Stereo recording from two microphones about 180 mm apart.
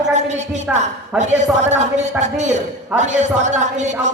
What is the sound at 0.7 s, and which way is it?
A man's voice, 40° right (ahead or behind).